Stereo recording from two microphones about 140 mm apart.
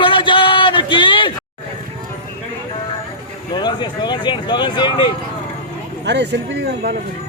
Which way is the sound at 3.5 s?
30° left (ahead or behind).